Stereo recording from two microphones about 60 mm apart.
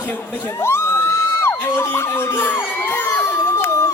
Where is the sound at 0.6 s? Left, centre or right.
Left.